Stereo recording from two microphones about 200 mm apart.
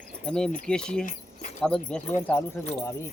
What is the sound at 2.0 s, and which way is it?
Speech, 35° left (ahead or behind).